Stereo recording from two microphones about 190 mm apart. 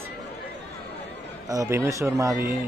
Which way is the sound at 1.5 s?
15° right (ahead or behind).